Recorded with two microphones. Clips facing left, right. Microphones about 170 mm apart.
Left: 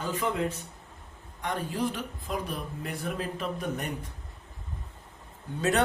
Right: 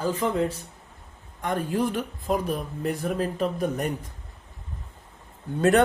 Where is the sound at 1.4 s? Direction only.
50° right (ahead or behind).